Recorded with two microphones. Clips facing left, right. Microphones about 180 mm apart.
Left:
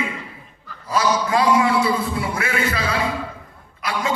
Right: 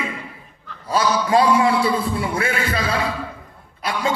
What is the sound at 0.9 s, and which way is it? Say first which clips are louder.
A man's voice: right 1 dB; 30° right (ahead or behind).